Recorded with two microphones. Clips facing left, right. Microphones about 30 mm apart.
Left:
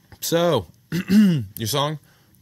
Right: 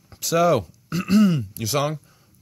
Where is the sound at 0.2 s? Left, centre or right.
Left.